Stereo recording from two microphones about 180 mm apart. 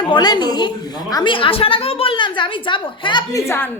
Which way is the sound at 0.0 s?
25° left (ahead or behind).